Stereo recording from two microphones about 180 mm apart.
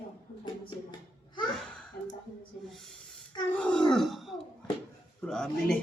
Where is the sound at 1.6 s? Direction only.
5° left (ahead or behind).